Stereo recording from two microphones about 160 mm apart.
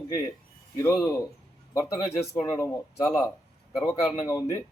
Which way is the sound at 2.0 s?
15° left (ahead or behind).